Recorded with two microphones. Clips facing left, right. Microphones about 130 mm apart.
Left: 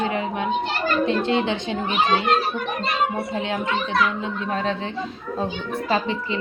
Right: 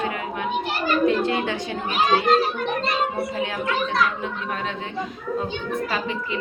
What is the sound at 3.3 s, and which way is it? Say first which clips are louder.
A child's voice: left 1 dB; 25° left (ahead or behind).